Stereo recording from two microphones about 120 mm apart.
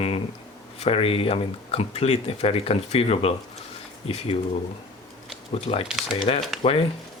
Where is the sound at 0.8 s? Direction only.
50° left (ahead or behind).